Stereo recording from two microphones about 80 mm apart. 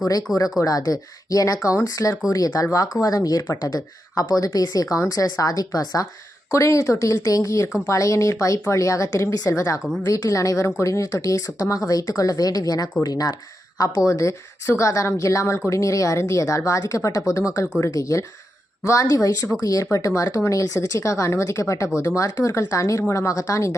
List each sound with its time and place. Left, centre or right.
0.0 s speech: left